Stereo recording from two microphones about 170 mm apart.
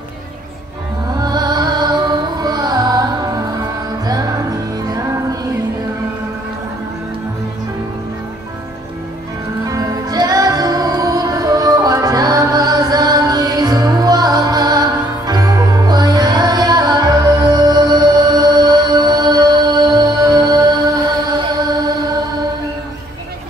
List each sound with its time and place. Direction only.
1.1 s music: 25° right (ahead or behind)
9.7 s music: 20° right (ahead or behind)